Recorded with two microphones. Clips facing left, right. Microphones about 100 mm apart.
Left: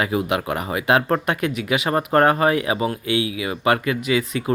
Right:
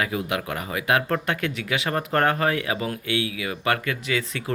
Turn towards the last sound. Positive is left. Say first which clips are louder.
# left 6 dB
turn(degrees=10)  # may be behind; listen again after turning